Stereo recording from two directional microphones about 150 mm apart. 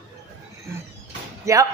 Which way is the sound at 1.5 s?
20° right (ahead or behind).